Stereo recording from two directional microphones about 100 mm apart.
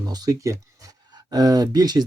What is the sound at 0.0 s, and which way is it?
Speech, 40° right (ahead or behind).